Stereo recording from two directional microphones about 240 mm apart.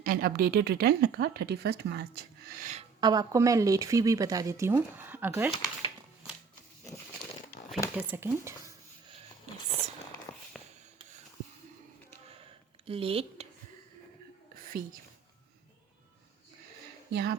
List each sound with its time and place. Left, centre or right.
0.0 s speech: right
3.0 s speech: centre
7.6 s a sound: left
7.9 s speech: centre
10.5 s rub: centre
12.8 s speech: right
14.5 s whispering: right
17.1 s speech: right